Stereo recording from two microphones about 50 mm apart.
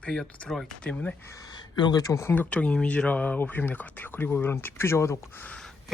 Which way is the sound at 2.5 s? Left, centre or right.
Left.